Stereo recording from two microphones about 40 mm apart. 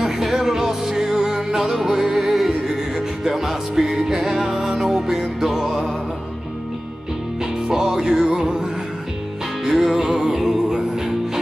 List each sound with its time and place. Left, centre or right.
0.0 s music: centre
7.6 s music: centre
9.7 s music: centre